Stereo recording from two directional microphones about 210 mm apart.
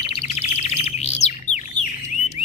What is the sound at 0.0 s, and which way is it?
Bird, 30° left (ahead or behind).